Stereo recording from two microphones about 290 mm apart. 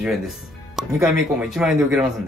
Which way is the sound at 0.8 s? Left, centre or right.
Centre.